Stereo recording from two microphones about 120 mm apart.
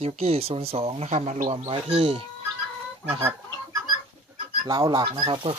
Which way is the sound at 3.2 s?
25° right (ahead or behind).